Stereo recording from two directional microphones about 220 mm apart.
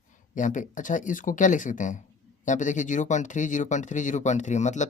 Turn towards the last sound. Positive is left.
turn(degrees=30)  # may be behind; listen again after turning